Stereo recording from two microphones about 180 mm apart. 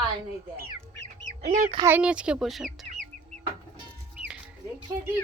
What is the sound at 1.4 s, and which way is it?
Speech, 40° right (ahead or behind).